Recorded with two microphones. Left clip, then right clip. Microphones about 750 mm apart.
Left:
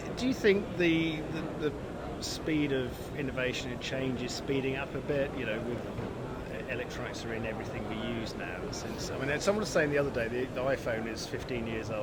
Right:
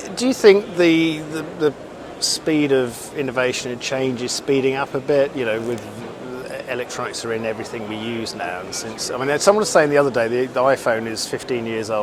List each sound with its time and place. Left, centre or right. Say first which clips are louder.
0.2 s speech: right 15 dB; right
2.2 s speech: right 14 dB; right
9.0 s speech: right 15 dB; right